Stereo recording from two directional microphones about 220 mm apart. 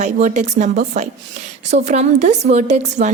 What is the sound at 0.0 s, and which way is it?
A woman's voice, 30° right (ahead or behind).